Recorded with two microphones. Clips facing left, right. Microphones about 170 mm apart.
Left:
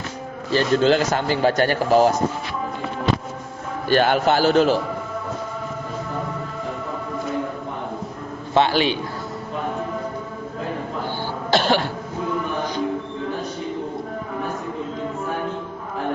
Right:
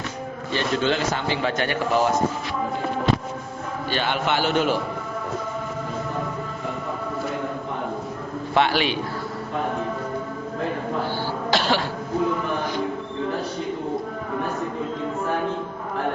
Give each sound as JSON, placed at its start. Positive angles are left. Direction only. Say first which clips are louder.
{"t": 0.5, "sound": "a man's voice", "louder": "left 6 dB", "side_deg": 40}
{"t": 3.8, "sound": "a man's voice", "louder": "left 7 dB", "side_deg": 45}
{"t": 8.5, "sound": "a man's voice", "louder": "left 3 dB", "side_deg": 30}
{"t": 11.5, "sound": "cough", "louder": "left 4 dB", "side_deg": 50}